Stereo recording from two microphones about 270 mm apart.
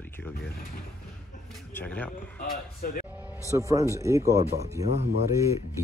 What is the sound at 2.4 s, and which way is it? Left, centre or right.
Speech, left.